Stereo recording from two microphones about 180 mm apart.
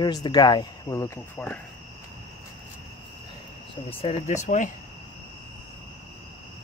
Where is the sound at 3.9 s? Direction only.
40° left (ahead or behind).